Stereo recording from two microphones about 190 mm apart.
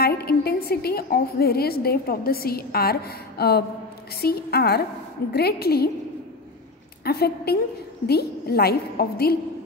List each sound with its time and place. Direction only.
0.0 s a woman's voice: 55° left (ahead or behind)
7.1 s a woman's voice: 55° left (ahead or behind)